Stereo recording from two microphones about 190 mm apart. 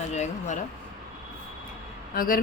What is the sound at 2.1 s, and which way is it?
Speech, 50° left (ahead or behind).